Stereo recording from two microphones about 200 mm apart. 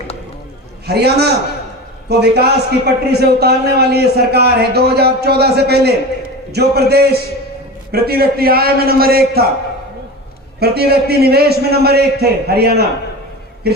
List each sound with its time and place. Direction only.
0.9 s a man's voice: 55° right (ahead or behind)
10.6 s a man's voice: 50° right (ahead or behind)